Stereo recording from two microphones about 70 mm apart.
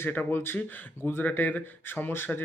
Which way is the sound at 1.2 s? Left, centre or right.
Left.